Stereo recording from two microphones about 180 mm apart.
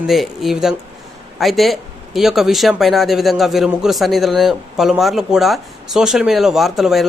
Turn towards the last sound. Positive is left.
turn(degrees=0)  # may be behind; listen again after turning